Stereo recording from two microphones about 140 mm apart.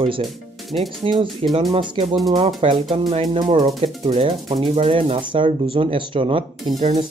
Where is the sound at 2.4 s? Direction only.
45° right (ahead or behind).